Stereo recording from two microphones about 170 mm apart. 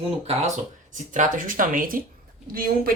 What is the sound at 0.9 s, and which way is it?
A woman's voice, 50° right (ahead or behind).